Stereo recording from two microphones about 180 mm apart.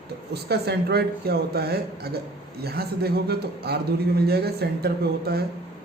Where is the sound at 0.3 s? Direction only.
65° right (ahead or behind).